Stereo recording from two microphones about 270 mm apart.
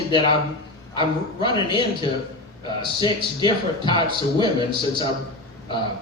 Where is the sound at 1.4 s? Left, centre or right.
Centre.